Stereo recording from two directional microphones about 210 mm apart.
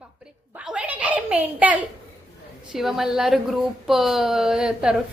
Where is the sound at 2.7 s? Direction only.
Centre (ahead or behind).